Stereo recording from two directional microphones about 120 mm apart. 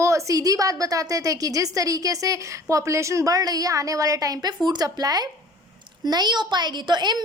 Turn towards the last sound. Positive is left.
turn(degrees=-35)  # may be behind; listen again after turning